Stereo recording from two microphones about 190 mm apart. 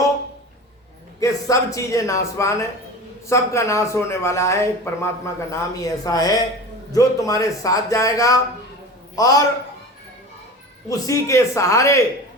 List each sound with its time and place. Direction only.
1.2 s a man's voice: 15° left (ahead or behind)
10.8 s a man's voice: 20° left (ahead or behind)